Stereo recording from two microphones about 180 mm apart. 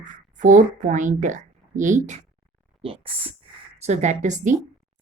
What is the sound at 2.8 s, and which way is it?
Speech, 30° right (ahead or behind).